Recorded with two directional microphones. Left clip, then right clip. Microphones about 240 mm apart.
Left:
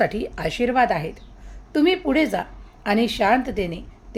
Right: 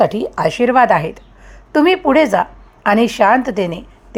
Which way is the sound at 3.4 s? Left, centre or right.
Centre.